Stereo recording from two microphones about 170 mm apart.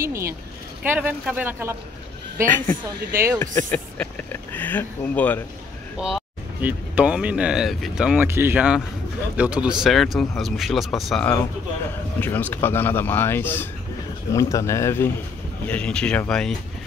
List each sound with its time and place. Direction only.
0.0 s speech: 15° right (ahead or behind)
2.5 s speech: 10° left (ahead or behind)
3.1 s speech: 15° right (ahead or behind)
3.3 s speech: 10° left (ahead or behind)
5.9 s speech: 5° right (ahead or behind)
11.9 s speech: 10° left (ahead or behind)